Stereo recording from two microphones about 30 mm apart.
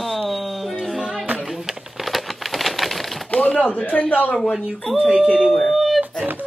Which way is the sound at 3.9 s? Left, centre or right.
Left.